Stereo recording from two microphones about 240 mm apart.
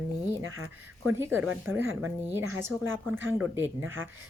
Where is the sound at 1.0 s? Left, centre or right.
Centre.